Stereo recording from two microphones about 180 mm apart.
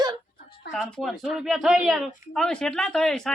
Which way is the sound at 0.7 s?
Centre (ahead or behind).